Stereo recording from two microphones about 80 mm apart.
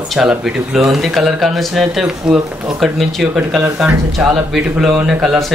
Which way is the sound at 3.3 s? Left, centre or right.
Centre.